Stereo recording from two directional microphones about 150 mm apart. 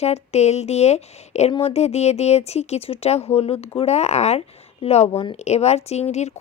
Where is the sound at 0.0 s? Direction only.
45° left (ahead or behind).